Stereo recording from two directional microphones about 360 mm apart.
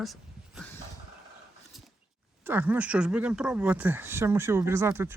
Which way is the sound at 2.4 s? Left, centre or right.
Centre.